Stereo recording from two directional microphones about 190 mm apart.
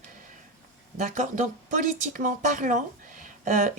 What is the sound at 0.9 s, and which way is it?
A woman's voice, 40° right (ahead or behind).